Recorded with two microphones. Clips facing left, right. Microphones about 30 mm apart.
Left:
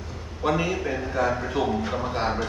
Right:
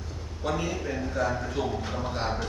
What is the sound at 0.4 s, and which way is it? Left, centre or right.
A man's voice, left.